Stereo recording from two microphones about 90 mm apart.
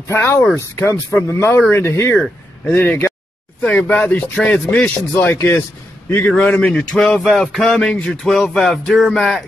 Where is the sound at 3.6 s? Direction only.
10° left (ahead or behind).